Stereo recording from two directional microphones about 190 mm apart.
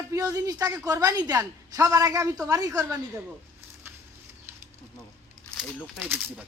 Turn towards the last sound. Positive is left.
turn(degrees=-10)  # may be behind; listen again after turning